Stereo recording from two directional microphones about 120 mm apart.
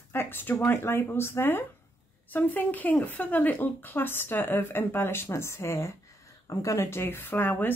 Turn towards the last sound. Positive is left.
turn(degrees=15)  # may be behind; listen again after turning